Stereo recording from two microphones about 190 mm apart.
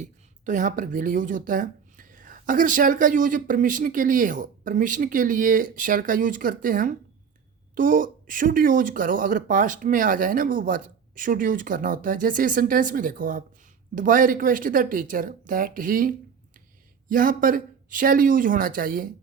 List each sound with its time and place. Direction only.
0.0 s a woman's voice: 40° right (ahead or behind)